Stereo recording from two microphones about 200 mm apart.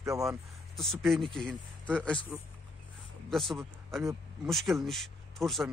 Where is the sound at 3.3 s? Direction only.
Centre (ahead or behind).